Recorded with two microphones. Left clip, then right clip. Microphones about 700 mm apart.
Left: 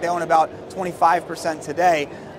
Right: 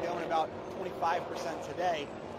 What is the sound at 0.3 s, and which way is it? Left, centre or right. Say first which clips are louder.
A man's voice: left 17 dB; left.